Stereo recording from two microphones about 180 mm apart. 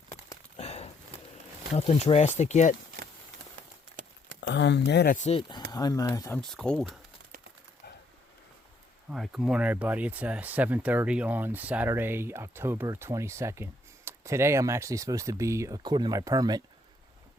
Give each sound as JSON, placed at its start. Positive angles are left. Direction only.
{"t": 0.5, "sound": "a sound", "side_deg": 35}
{"t": 1.7, "sound": "speech", "side_deg": 35}
{"t": 4.4, "sound": "speech", "side_deg": 75}
{"t": 5.1, "sound": "speech", "side_deg": 40}
{"t": 5.4, "sound": "speech", "side_deg": 25}
{"t": 6.4, "sound": "speech", "side_deg": 0}
{"t": 9.0, "sound": "speech", "side_deg": 0}